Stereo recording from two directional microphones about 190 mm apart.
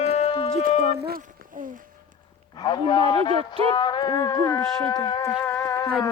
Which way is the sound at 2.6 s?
25° left (ahead or behind).